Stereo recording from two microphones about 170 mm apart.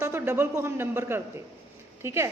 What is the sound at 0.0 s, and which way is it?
A man's voice, 15° right (ahead or behind).